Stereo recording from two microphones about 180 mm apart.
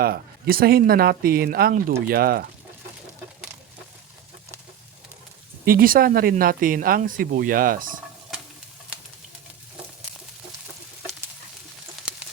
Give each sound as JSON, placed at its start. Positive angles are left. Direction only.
{"t": 0.0, "sound": "speech", "side_deg": -55}
{"t": 5.6, "sound": "speech", "side_deg": -55}
{"t": 8.3, "sound": "stir", "side_deg": 0}